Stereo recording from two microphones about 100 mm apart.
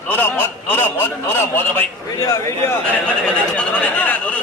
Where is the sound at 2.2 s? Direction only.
35° left (ahead or behind).